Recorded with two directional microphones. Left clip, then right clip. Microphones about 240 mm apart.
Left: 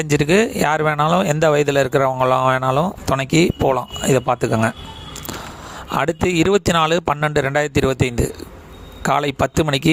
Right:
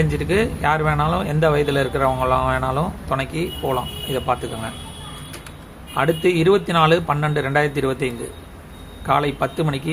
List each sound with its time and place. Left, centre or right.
0.0 s speech: left
6.0 s speech: left